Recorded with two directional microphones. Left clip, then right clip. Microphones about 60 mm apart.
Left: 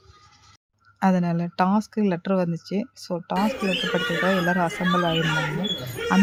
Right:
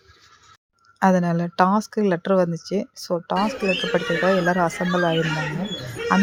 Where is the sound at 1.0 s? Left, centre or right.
Right.